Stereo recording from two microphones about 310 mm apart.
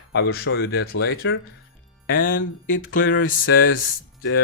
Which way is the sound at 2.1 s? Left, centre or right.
Left.